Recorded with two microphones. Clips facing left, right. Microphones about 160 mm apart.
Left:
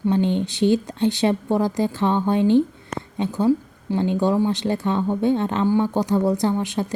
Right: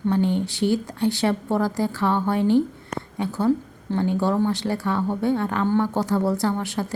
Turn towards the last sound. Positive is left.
turn(degrees=20)  # may be behind; listen again after turning